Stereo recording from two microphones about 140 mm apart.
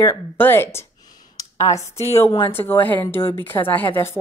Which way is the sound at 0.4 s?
15° left (ahead or behind).